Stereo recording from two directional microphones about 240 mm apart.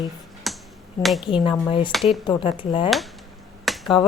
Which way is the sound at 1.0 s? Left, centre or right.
Centre.